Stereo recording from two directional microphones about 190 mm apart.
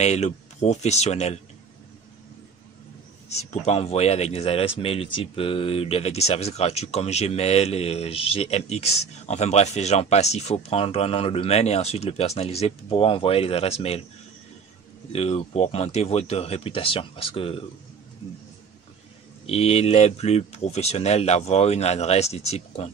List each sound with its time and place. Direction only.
0.0 s a man's voice: 35° left (ahead or behind)
3.3 s a man's voice: 35° left (ahead or behind)
15.1 s a man's voice: 35° left (ahead or behind)
19.4 s a man's voice: 30° left (ahead or behind)